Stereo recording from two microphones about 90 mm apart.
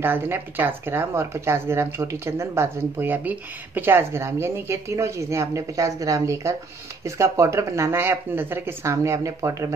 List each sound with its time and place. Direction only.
0.0 s speech: 25° right (ahead or behind)